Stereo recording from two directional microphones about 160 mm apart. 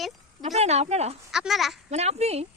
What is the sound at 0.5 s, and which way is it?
Speech, 40° right (ahead or behind).